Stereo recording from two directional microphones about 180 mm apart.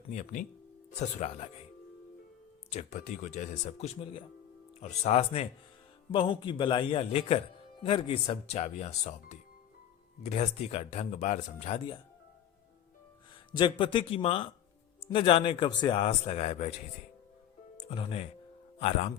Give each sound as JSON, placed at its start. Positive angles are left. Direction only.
{"t": 0.1, "sound": "speech", "side_deg": 45}
{"t": 2.6, "sound": "a man's voice", "side_deg": 35}
{"t": 13.5, "sound": "a man's voice", "side_deg": 25}
{"t": 17.7, "sound": "speech", "side_deg": 30}